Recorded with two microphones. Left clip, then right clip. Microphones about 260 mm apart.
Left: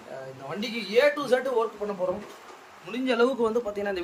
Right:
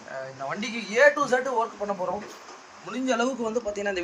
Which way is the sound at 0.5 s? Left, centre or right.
Centre.